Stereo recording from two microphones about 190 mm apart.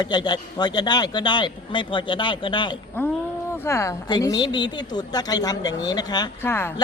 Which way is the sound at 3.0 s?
10° left (ahead or behind).